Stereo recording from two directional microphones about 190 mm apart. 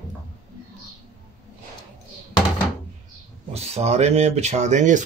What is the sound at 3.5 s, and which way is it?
Speech, 35° right (ahead or behind).